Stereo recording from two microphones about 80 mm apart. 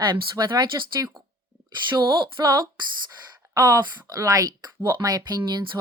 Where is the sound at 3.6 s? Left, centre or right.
Right.